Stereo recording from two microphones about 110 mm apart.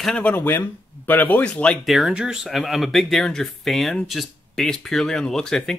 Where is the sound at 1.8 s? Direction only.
5° right (ahead or behind).